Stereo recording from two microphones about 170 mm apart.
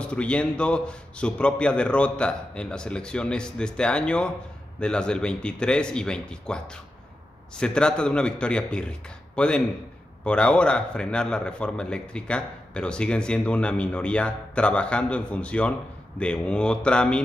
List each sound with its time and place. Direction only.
0.0 s a man's voice: 5° left (ahead or behind)